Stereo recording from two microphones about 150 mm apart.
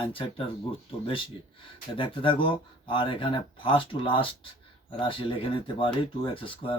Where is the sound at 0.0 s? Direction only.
35° left (ahead or behind).